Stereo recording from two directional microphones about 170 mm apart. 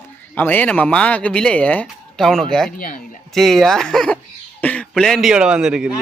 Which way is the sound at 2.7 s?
55° left (ahead or behind).